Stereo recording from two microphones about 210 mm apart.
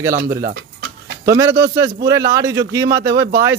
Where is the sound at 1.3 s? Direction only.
15° right (ahead or behind).